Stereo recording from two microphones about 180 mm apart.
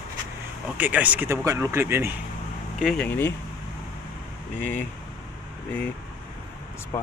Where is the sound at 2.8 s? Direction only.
Centre (ahead or behind).